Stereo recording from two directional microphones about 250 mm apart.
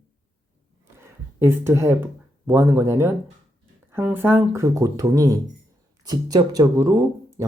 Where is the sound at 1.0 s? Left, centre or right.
Centre.